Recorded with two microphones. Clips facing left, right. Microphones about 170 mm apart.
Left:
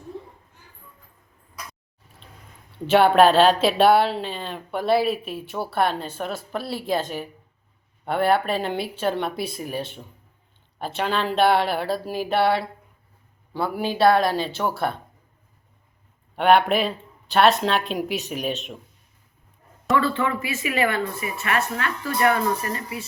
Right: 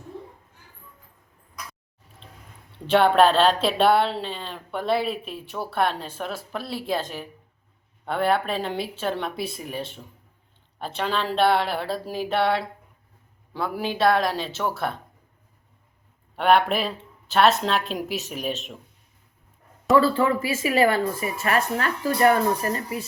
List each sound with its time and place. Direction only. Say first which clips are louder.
2.7 s a woman's voice: left 2 dB; 5° left (ahead or behind)
16.3 s a woman's voice: left 2 dB; centre (ahead or behind)
20.0 s a woman's voice: right 4 dB; 35° right (ahead or behind)